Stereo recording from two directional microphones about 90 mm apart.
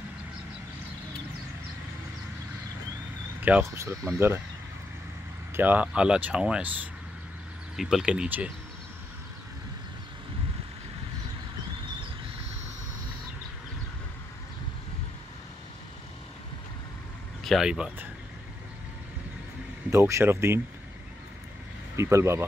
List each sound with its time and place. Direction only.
3.7 s speech: 30° right (ahead or behind)
5.6 s speech: 20° right (ahead or behind)
7.7 s speech: 5° right (ahead or behind)
17.4 s speech: centre (ahead or behind)
19.9 s speech: 30° right (ahead or behind)
21.9 s speech: 30° right (ahead or behind)